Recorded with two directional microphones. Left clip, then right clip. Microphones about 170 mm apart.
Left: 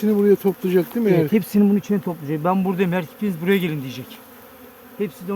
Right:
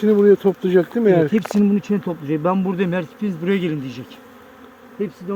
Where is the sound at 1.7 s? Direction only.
15° left (ahead or behind).